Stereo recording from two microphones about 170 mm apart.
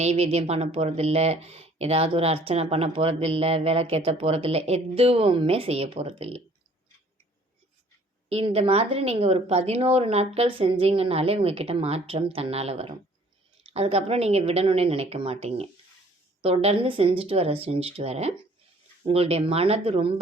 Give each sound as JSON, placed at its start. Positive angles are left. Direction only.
{"t": 0.0, "sound": "speech", "side_deg": -40}
{"t": 8.3, "sound": "speech", "side_deg": -35}